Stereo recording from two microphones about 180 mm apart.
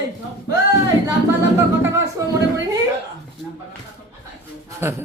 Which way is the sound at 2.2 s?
20° right (ahead or behind).